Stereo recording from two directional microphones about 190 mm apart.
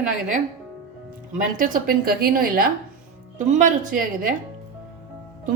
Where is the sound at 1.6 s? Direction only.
50° right (ahead or behind).